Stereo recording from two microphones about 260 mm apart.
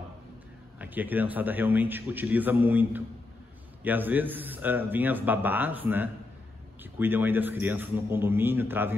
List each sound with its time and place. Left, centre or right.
0.7 s speech: centre